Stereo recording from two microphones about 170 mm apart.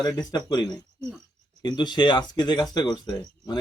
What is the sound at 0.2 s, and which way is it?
A man's voice, 25° left (ahead or behind).